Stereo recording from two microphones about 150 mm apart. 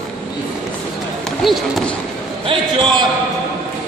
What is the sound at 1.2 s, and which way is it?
Speech, centre (ahead or behind).